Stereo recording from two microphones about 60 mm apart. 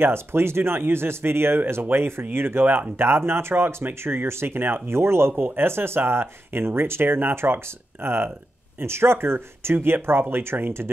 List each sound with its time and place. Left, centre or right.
0.0 s speech: right